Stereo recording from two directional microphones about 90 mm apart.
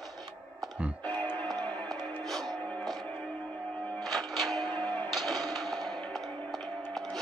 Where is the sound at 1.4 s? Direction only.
5° left (ahead or behind).